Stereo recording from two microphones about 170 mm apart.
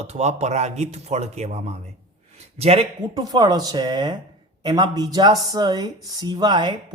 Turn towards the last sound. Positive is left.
turn(degrees=-25)  # may be behind; listen again after turning